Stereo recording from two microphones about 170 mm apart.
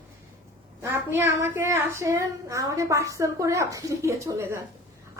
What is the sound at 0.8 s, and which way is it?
A woman's voice, 15° right (ahead or behind).